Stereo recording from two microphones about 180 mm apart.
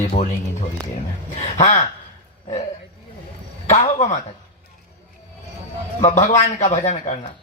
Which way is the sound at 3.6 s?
40° left (ahead or behind).